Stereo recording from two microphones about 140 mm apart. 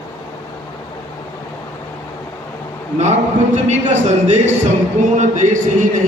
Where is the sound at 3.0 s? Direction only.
55° right (ahead or behind).